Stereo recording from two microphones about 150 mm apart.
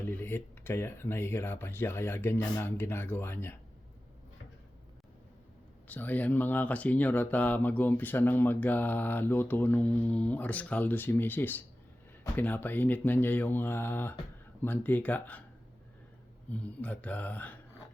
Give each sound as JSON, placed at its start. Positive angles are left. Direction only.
{"t": 0.0, "sound": "speech", "side_deg": 15}
{"t": 5.9, "sound": "speech", "side_deg": 10}
{"t": 16.5, "sound": "speech", "side_deg": 10}